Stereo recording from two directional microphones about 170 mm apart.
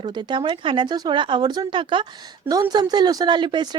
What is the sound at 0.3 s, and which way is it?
A woman's voice, 30° right (ahead or behind).